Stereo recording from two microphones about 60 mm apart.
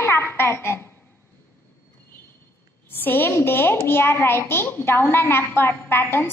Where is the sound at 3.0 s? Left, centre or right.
Left.